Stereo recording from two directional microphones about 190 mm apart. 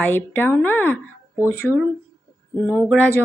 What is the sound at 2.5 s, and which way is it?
Speech, 10° left (ahead or behind).